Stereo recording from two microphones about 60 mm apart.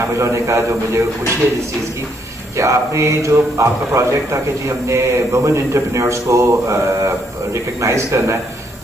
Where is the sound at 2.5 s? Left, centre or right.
Right.